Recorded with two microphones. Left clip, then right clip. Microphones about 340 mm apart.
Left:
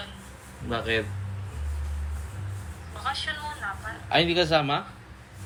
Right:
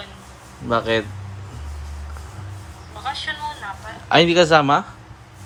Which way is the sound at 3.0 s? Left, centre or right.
Centre.